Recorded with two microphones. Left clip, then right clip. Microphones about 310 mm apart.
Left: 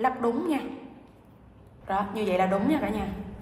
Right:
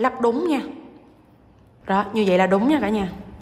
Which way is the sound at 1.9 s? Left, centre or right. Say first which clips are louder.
Right 8 dB; right.